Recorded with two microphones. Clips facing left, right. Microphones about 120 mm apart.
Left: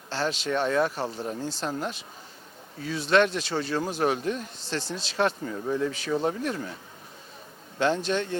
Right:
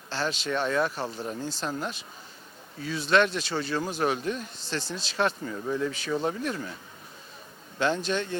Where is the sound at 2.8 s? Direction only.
45° left (ahead or behind).